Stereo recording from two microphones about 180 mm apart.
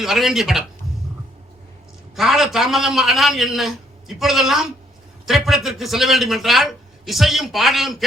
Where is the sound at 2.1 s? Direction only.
Centre (ahead or behind).